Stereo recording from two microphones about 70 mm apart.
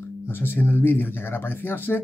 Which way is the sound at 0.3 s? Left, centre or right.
Left.